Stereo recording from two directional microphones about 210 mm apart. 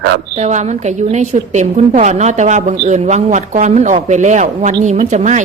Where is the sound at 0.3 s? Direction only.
35° right (ahead or behind).